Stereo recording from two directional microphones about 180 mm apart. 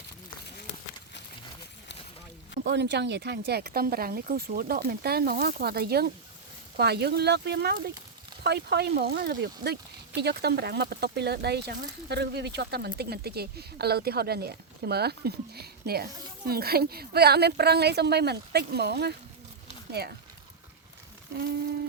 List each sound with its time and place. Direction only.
2.6 s speech: 70° right (ahead or behind)